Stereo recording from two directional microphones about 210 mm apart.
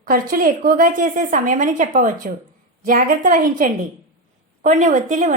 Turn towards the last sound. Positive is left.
turn(degrees=-35)  # may be behind; listen again after turning